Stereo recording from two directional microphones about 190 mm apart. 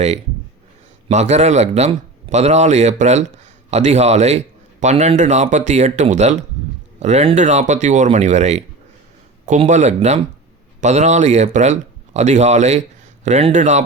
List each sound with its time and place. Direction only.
1.0 s a man's voice: 35° right (ahead or behind)